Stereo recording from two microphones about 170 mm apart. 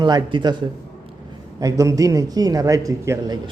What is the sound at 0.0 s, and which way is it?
Speech, 25° right (ahead or behind).